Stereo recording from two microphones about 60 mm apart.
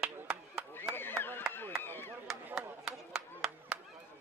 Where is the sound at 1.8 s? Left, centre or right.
Left.